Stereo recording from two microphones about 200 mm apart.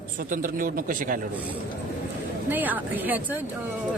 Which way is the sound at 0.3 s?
40° right (ahead or behind).